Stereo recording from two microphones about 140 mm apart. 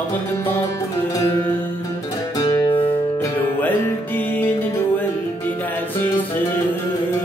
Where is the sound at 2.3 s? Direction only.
30° left (ahead or behind).